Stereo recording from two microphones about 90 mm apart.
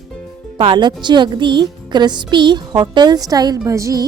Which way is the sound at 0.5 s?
60° right (ahead or behind).